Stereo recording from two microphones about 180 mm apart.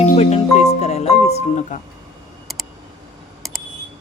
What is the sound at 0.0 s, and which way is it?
Music, 40° left (ahead or behind).